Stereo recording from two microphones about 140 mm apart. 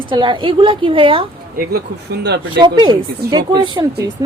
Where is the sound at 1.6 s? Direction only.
90° right.